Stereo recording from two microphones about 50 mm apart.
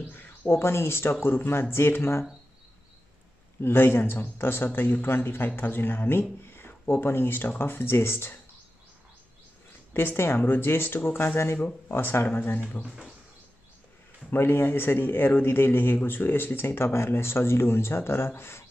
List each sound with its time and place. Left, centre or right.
0.1 s a sound: left
0.5 s speech: left
3.6 s speech: left
9.9 s speech: left
12.8 s speech: centre
14.3 s speech: left